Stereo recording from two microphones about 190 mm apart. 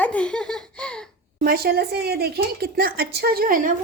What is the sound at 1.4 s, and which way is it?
A woman's voice, 55° right (ahead or behind).